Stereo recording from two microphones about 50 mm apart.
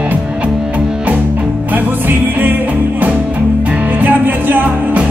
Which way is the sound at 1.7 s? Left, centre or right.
Right.